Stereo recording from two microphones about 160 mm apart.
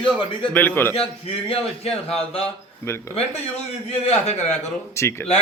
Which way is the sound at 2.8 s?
15° left (ahead or behind).